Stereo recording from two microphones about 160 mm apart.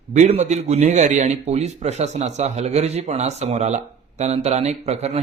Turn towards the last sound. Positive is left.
turn(degrees=-40)  # may be behind; listen again after turning